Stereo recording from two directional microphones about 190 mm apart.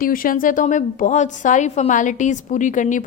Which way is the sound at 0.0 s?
50° left (ahead or behind).